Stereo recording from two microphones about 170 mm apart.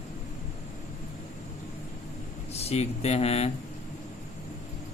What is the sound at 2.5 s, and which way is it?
Speech, 40° left (ahead or behind).